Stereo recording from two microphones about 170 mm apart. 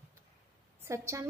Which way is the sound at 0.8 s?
15° right (ahead or behind).